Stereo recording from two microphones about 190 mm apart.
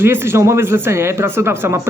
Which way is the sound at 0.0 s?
10° right (ahead or behind).